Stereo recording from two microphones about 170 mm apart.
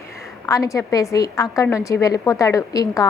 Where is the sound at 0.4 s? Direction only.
20° left (ahead or behind).